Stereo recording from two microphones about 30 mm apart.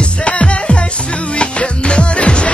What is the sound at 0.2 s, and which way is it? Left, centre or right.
Music, left.